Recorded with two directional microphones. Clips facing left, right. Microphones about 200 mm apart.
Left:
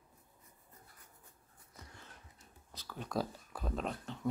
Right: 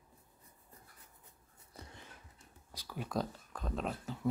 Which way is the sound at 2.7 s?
10° right (ahead or behind).